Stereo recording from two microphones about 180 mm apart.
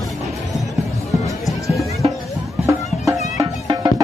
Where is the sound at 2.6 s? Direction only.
15° right (ahead or behind).